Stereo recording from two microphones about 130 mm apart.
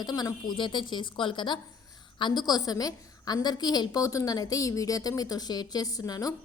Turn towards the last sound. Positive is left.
turn(degrees=30)  # may be behind; listen again after turning